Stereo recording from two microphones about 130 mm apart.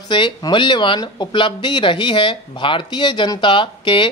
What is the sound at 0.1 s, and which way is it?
Speech, 40° left (ahead or behind).